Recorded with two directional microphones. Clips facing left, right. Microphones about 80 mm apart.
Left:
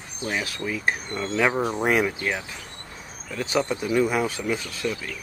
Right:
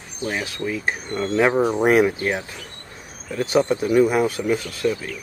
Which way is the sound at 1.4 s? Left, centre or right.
Centre.